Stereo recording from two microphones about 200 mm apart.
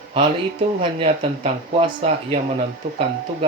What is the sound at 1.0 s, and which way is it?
Speech, 30° right (ahead or behind).